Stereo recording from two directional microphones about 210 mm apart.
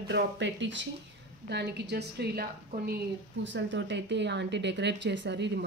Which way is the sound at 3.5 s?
60° right (ahead or behind).